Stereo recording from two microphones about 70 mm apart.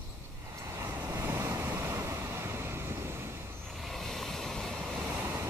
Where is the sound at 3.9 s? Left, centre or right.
Centre.